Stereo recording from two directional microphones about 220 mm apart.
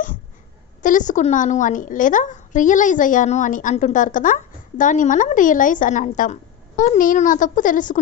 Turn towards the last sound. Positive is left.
turn(degrees=35)  # may be behind; listen again after turning